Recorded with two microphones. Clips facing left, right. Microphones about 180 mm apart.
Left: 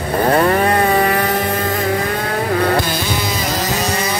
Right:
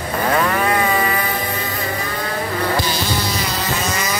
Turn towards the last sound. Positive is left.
turn(degrees=35)  # may be behind; listen again after turning